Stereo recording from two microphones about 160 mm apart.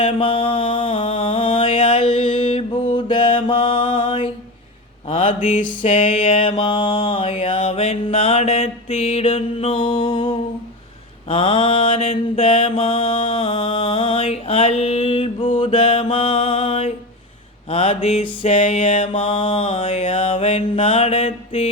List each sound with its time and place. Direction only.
0.0 s mantra: 35° left (ahead or behind)